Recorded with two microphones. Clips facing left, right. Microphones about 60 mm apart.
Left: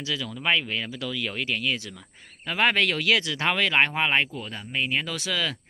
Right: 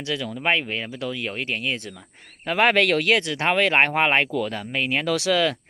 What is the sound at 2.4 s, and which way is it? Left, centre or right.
Speech, right.